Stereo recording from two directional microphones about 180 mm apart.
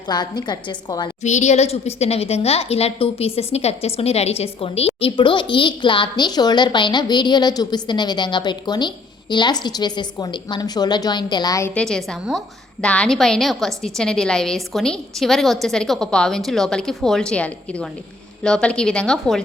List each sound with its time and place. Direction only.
0.1 s a woman's voice: 25° left (ahead or behind)
1.2 s a woman's voice: 40° left (ahead or behind); by 11.7 s 20° left (ahead or behind)
11.7 s a woman's voice: 5° left (ahead or behind)